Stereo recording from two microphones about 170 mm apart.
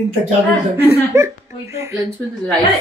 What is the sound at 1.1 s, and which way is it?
Speech, 15° right (ahead or behind).